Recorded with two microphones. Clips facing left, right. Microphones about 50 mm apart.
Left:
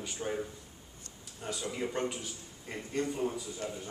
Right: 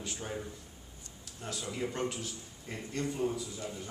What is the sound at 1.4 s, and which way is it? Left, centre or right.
A man's voice, centre.